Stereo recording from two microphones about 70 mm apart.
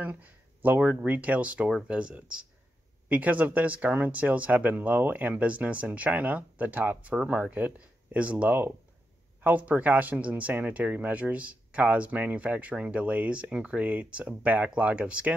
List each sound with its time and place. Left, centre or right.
0.0 s speech: right